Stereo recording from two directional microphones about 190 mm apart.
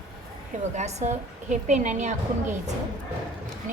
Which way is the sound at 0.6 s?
35° right (ahead or behind).